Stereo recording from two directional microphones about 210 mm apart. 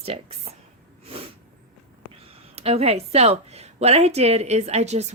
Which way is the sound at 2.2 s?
30° right (ahead or behind).